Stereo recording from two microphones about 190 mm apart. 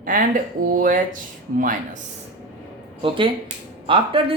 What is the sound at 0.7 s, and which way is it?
Speech, 45° right (ahead or behind).